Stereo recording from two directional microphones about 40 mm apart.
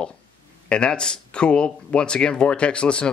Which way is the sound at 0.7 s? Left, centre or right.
Left.